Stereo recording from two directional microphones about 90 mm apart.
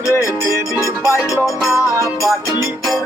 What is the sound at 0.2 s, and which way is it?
Music, 35° right (ahead or behind).